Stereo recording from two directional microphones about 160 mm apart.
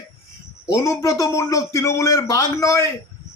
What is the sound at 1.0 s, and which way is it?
A man's voice, 20° left (ahead or behind).